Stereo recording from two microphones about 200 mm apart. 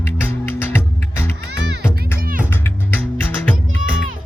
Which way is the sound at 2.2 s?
45° right (ahead or behind).